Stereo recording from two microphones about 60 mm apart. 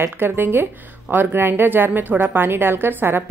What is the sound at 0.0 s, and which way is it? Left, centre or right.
A woman's voice, right.